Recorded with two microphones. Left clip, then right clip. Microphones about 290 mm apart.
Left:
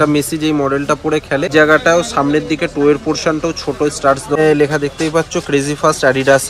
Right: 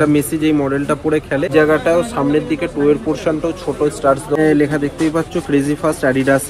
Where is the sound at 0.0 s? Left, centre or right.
Left.